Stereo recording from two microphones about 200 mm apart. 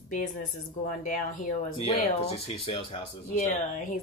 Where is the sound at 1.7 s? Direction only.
25° left (ahead or behind).